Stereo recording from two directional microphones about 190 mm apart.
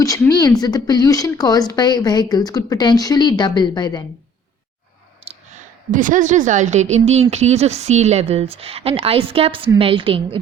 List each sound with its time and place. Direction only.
0.0 s speech: 20° left (ahead or behind)
5.2 s clicking: 30° right (ahead or behind)
5.9 s a woman's voice: 45° right (ahead or behind); by 10.2 s 25° right (ahead or behind)